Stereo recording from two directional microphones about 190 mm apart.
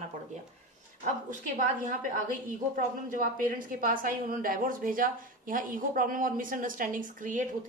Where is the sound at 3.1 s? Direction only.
45° right (ahead or behind).